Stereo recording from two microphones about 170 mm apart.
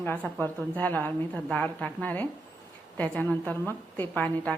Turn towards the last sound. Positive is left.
turn(degrees=10)  # may be behind; listen again after turning